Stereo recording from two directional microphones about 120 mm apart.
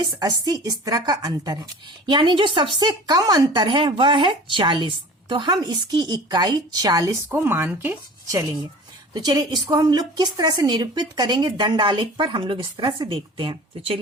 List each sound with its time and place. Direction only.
0.0 s a woman's voice: 35° right (ahead or behind)
9.1 s a woman's voice: 35° right (ahead or behind)